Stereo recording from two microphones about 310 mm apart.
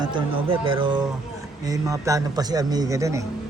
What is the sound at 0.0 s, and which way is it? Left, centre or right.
A man's voice, centre.